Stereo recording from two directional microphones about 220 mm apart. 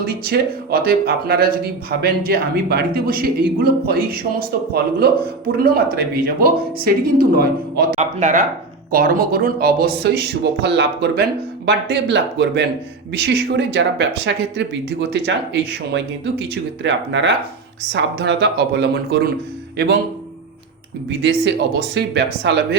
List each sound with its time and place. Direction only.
0.0 s speech: 45° right (ahead or behind)
5.6 s speech: 45° right (ahead or behind)
21.2 s speech: 55° right (ahead or behind)